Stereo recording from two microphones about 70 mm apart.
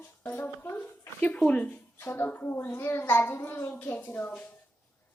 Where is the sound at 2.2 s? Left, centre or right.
Left.